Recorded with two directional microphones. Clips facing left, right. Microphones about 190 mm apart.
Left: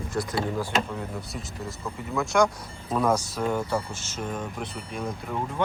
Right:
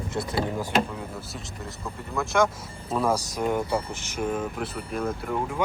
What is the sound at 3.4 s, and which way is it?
Speech, 15° right (ahead or behind).